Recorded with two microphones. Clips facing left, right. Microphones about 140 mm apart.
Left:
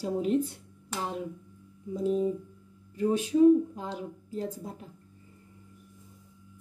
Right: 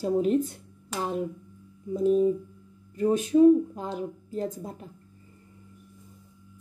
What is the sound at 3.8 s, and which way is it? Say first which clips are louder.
Speech: right 4 dB; 50° right (ahead or behind).